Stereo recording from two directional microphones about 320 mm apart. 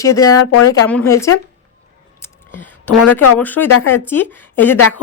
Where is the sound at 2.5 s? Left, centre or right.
Centre.